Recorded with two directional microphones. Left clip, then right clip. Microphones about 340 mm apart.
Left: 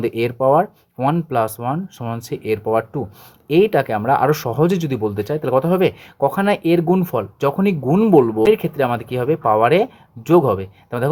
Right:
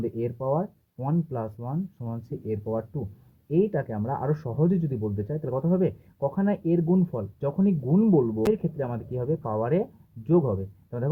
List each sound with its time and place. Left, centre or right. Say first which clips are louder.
0.0 s speech: left 12 dB; left